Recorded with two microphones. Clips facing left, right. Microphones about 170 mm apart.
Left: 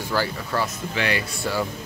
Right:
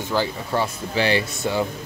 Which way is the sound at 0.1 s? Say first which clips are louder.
Right 2 dB; 20° right (ahead or behind).